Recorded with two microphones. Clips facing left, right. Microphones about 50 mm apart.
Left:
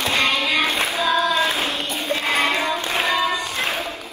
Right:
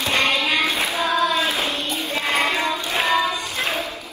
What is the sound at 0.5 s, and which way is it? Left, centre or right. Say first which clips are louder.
Music: left 1 dB; left.